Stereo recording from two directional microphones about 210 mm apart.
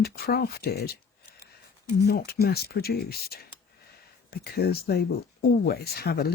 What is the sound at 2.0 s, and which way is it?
Speech, 45° left (ahead or behind).